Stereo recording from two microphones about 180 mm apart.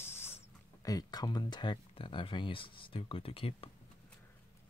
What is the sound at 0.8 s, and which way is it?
Speech, 20° left (ahead or behind).